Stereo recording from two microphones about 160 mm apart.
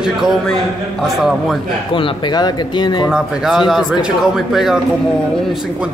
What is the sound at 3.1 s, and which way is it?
Speech, 5° right (ahead or behind).